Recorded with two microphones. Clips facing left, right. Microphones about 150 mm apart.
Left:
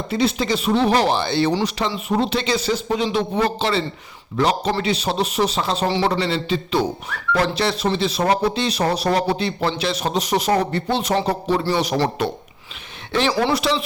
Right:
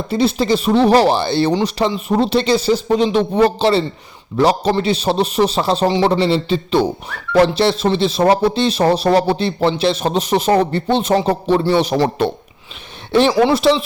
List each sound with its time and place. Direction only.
0.1 s a man's voice: 35° right (ahead or behind)
13.2 s speech: 15° right (ahead or behind)
13.5 s speech: 30° right (ahead or behind)